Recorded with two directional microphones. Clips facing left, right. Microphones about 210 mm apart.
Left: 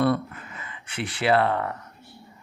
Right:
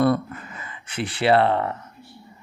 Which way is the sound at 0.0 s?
40° right (ahead or behind).